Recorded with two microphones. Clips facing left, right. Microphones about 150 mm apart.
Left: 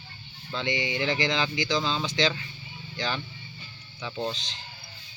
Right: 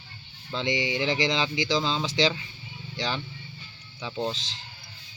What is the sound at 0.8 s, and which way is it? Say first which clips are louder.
Speech: right 1 dB; 20° right (ahead or behind).